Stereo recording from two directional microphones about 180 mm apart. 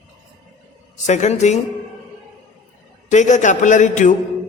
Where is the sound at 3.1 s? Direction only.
40° left (ahead or behind).